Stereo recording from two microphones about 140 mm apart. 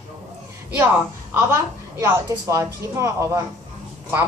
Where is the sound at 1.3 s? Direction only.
20° right (ahead or behind).